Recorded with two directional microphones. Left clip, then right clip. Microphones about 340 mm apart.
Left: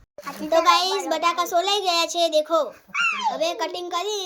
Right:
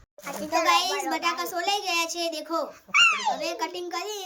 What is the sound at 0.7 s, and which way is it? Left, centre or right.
A child's voice, centre.